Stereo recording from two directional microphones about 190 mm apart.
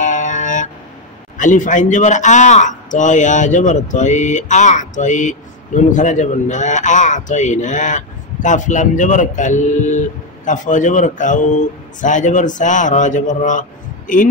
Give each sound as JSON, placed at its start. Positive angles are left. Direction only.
{"t": 0.0, "sound": "music", "side_deg": 40}
{"t": 1.4, "sound": "a man's voice", "side_deg": 40}